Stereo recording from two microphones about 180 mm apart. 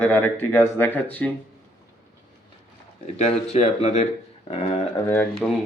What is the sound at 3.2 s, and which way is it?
Speech, 35° left (ahead or behind).